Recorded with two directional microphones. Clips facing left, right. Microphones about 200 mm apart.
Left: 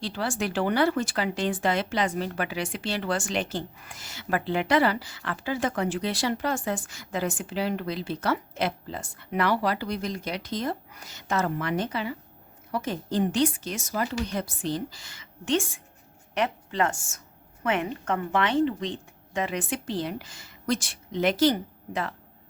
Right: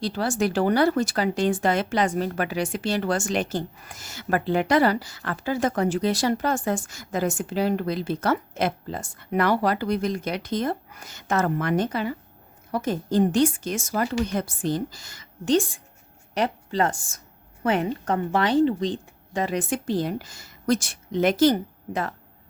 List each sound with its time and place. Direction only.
0.0 s a woman's voice: 40° right (ahead or behind)